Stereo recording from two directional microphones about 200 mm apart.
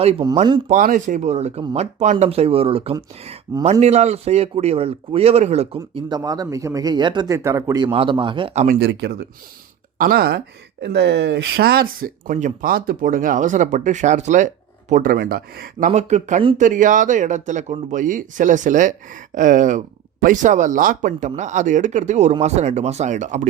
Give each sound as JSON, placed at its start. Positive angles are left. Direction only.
{"t": 0.0, "sound": "speech", "side_deg": -30}
{"t": 0.7, "sound": "a man's voice", "side_deg": -40}
{"t": 8.6, "sound": "speech", "side_deg": -50}
{"t": 15.9, "sound": "speech", "side_deg": -35}